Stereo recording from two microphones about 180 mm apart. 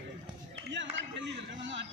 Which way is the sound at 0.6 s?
90° right.